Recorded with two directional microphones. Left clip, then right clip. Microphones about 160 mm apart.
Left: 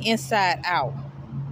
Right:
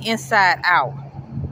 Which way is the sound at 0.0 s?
15° left (ahead or behind).